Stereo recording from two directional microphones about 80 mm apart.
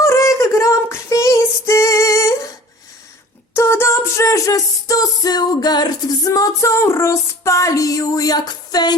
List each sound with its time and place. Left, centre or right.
0.0 s female singing: left
3.5 s music: left